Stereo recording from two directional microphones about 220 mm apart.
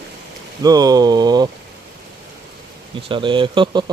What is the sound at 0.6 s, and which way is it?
Speech, 15° right (ahead or behind).